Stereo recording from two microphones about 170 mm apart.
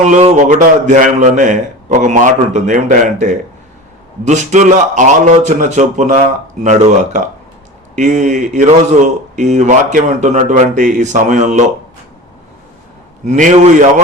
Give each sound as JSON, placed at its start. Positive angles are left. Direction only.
{"t": 0.0, "sound": "a man's voice", "side_deg": -40}
{"t": 13.2, "sound": "a man's voice", "side_deg": -45}